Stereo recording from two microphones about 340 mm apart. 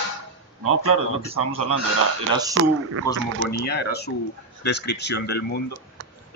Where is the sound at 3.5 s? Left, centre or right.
Left.